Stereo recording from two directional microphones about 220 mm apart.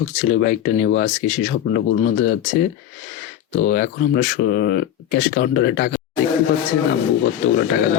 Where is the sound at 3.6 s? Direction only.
40° left (ahead or behind).